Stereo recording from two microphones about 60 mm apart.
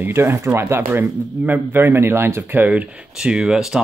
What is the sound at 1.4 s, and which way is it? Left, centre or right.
Speech, right.